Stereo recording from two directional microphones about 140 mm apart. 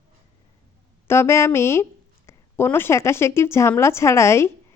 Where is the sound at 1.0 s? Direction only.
20° left (ahead or behind).